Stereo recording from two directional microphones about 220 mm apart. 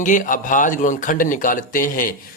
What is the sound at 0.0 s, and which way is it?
Speech, 35° left (ahead or behind).